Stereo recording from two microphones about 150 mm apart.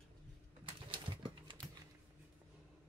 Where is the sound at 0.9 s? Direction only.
35° right (ahead or behind).